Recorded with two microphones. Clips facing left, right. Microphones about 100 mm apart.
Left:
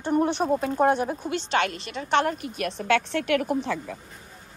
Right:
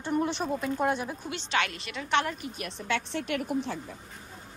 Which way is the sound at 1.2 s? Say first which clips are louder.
Left 5 dB; 35° left (ahead or behind).